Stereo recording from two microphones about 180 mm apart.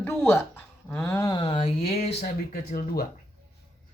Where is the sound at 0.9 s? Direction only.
15° left (ahead or behind); by 2.1 s 35° left (ahead or behind).